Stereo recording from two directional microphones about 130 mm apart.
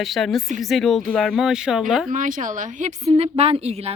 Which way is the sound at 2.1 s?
85° right.